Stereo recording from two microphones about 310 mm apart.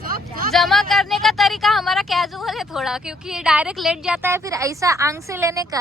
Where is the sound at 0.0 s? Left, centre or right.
Right.